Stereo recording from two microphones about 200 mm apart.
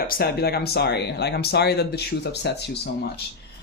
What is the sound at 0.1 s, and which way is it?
Speech, 50° left (ahead or behind).